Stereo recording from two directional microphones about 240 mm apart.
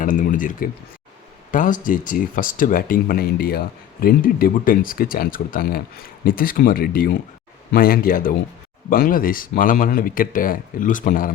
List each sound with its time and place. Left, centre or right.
0.0 s speech: left